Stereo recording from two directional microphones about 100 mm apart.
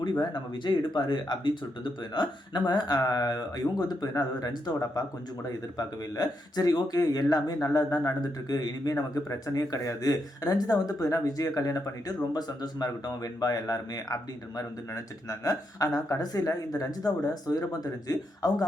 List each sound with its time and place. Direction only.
0.0 s speech: 50° left (ahead or behind)